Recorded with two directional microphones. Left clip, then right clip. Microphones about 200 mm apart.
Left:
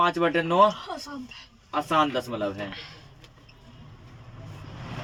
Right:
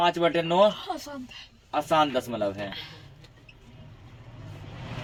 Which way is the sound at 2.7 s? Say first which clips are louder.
Right 1 dB; 20° right (ahead or behind).